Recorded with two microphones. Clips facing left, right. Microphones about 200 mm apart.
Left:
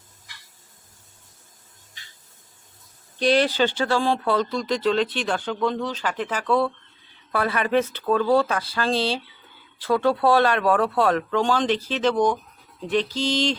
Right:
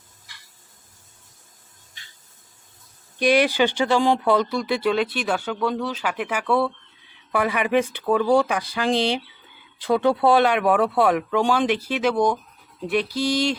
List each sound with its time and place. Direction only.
3.2 s speech: 10° right (ahead or behind)